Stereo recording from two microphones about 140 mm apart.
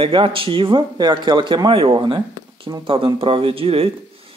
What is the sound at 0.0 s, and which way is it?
A man's voice, 40° right (ahead or behind).